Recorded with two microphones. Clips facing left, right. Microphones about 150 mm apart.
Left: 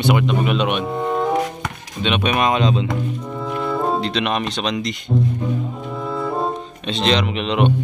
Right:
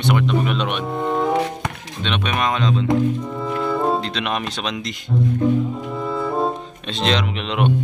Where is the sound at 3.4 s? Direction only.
Centre (ahead or behind).